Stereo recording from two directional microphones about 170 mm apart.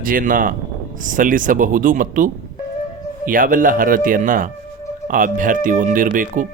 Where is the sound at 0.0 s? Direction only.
55° right (ahead or behind).